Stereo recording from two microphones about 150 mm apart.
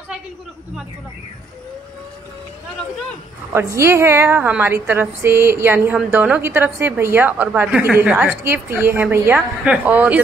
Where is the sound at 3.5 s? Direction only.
20° right (ahead or behind).